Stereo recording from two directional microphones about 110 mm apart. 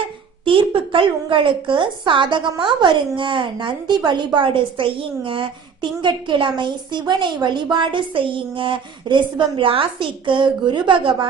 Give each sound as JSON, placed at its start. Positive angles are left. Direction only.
{"t": 0.4, "sound": "a woman's voice", "side_deg": -50}